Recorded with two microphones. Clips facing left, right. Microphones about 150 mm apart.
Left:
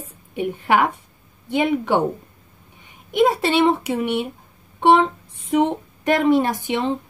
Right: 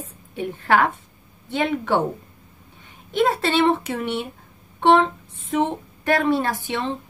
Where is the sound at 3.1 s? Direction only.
15° left (ahead or behind).